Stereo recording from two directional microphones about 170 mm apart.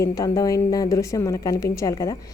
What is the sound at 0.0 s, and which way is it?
Speech, 20° left (ahead or behind).